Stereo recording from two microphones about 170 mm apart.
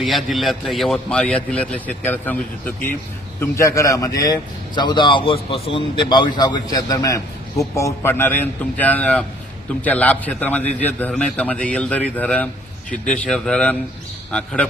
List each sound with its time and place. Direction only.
0.0 s a man's voice: centre (ahead or behind)